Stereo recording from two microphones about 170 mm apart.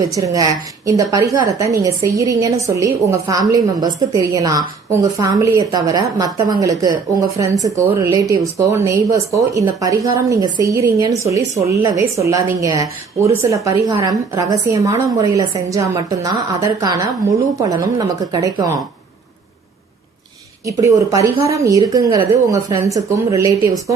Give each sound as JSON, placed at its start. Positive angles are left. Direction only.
{"t": 0.1, "sound": "a woman's voice", "side_deg": -20}
{"t": 20.7, "sound": "a woman's voice", "side_deg": -20}